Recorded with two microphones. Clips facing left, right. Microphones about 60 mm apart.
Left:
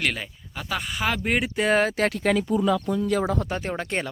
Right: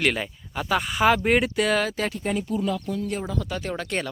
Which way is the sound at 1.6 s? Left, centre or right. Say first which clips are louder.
Left 2 dB; left.